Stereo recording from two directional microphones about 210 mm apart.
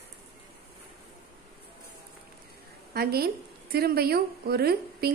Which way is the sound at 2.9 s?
50° right (ahead or behind).